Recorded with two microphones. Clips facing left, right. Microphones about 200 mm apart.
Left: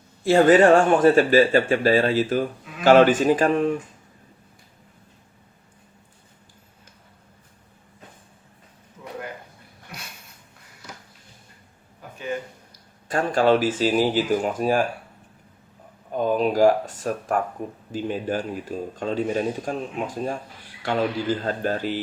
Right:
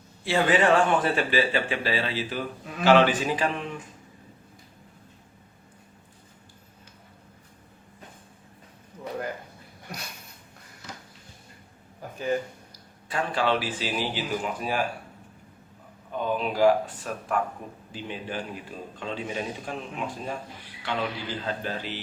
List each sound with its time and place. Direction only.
0.3 s speech: 45° left (ahead or behind)
13.1 s speech: 45° left (ahead or behind)
16.1 s speech: 40° left (ahead or behind)